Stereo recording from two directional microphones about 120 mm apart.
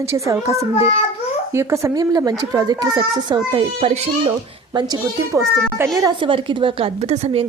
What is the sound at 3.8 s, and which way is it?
Speech, 55° right (ahead or behind).